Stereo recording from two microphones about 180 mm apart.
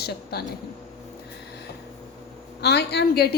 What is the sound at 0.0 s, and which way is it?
Speech, 65° left (ahead or behind).